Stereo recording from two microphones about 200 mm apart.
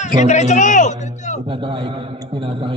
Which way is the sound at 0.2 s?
35° left (ahead or behind).